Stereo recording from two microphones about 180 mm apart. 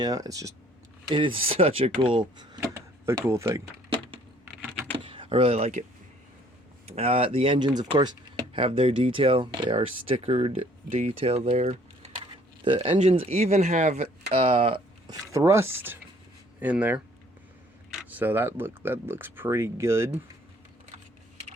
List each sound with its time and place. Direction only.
0.0 s speech: 20° right (ahead or behind)
5.0 s speech: 30° right (ahead or behind)
6.8 s speech: 30° right (ahead or behind); by 20.1 s 15° right (ahead or behind)